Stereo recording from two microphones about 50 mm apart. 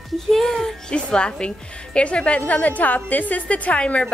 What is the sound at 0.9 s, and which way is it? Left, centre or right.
A woman's voice, centre.